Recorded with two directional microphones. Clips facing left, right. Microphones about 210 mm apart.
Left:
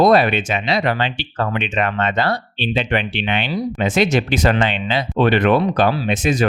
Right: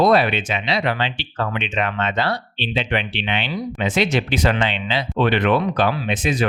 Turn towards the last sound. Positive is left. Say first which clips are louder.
# left 3 dB
turn(degrees=45)  # may be behind; listen again after turning